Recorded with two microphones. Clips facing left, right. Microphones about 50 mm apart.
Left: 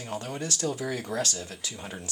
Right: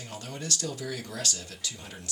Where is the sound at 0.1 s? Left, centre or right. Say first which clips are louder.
Left 4 dB; left.